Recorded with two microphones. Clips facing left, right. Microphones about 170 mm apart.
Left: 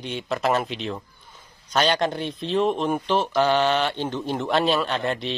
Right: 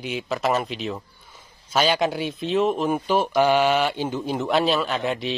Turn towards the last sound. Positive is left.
turn(degrees=0)  # may be behind; listen again after turning